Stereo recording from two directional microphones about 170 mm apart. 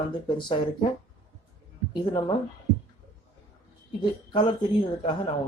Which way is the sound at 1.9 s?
25° left (ahead or behind).